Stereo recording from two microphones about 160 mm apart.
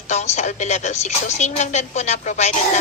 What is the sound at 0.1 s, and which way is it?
A woman's voice, 45° left (ahead or behind).